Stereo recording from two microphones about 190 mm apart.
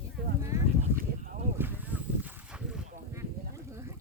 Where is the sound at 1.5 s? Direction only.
10° right (ahead or behind).